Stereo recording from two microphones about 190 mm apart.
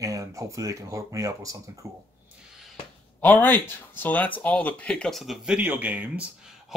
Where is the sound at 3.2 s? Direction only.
10° left (ahead or behind).